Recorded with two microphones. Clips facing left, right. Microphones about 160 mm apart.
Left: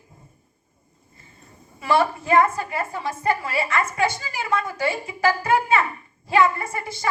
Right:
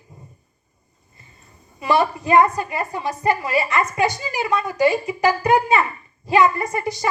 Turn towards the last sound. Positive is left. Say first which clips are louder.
# right 3 dB
turn(degrees=-20)  # may be behind; listen again after turning